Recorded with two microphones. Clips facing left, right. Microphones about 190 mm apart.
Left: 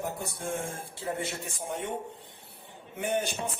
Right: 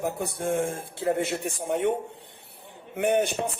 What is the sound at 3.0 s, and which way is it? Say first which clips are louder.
Music: right 7 dB; 65° right (ahead or behind).